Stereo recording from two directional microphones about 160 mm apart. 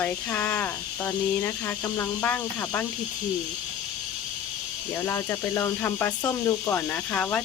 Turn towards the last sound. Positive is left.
turn(degrees=10)  # may be behind; listen again after turning